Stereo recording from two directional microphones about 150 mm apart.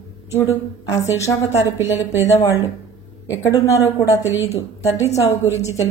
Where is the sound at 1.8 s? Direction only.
15° right (ahead or behind).